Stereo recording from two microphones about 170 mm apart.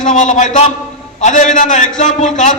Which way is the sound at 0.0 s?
45° left (ahead or behind).